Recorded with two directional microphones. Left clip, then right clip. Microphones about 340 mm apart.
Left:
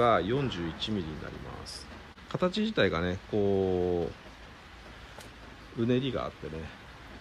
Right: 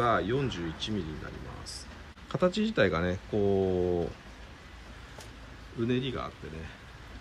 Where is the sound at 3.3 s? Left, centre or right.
Centre.